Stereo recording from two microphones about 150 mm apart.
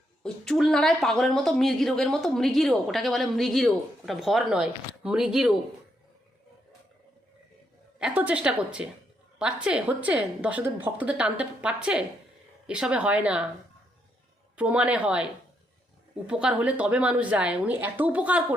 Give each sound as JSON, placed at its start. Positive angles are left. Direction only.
{"t": 0.2, "sound": "speech", "side_deg": 5}
{"t": 7.9, "sound": "a woman's voice", "side_deg": -10}
{"t": 14.5, "sound": "a woman's voice", "side_deg": -10}